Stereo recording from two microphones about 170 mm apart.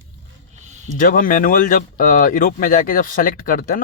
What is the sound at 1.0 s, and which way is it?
Speech, 55° left (ahead or behind).